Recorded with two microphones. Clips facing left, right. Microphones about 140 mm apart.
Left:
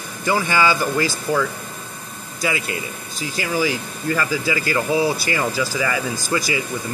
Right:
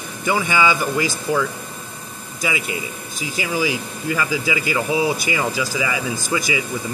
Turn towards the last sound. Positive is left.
turn(degrees=-15)  # may be behind; listen again after turning